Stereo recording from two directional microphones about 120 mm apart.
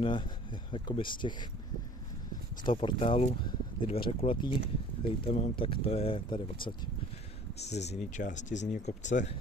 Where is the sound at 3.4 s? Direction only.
40° left (ahead or behind).